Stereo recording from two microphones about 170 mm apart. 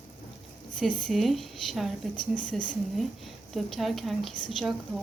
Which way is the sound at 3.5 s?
Centre (ahead or behind).